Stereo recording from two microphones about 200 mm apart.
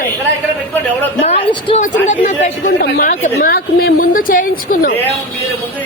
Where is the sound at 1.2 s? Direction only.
30° left (ahead or behind).